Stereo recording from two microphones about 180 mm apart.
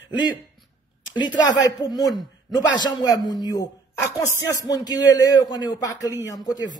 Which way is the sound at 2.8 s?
25° left (ahead or behind).